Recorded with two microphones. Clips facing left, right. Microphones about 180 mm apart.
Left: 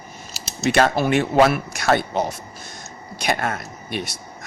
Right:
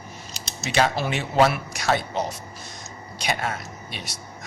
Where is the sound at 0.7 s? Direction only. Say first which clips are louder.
Left 5 dB; 50° left (ahead or behind).